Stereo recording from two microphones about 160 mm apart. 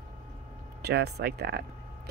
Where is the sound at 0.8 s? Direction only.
85° right.